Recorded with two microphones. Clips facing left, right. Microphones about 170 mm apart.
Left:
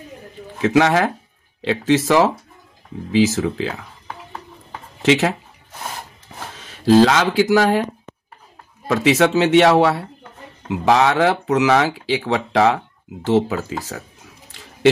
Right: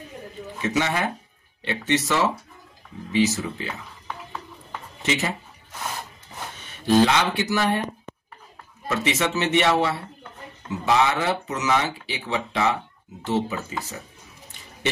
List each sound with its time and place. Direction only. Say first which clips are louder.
0.6 s speech: left 9 dB; 90° left
5.0 s speech: left 10 dB; 90° left
6.5 s speech: left 6 dB; 90° left
8.8 s speech: left 9 dB; 90° left
14.5 s a sound: left 5 dB; 90° left